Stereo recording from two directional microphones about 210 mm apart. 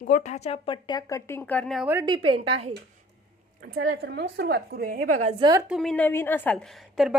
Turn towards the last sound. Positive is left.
turn(degrees=0)  # may be behind; listen again after turning